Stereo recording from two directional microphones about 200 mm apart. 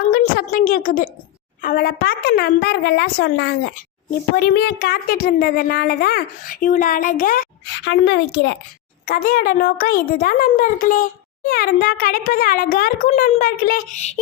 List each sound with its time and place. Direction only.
0.1 s a woman's voice: 45° left (ahead or behind); by 8.5 s 60° left (ahead or behind)
9.0 s a woman's voice: 45° left (ahead or behind)